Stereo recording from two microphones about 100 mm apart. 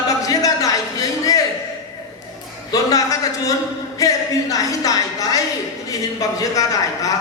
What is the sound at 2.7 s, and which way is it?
A man's voice, 35° left (ahead or behind).